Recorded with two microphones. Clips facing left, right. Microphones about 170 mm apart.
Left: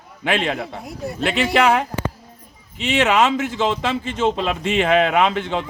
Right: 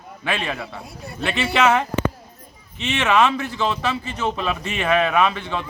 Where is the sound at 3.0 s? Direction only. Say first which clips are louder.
Right 1 dB; 20° left (ahead or behind).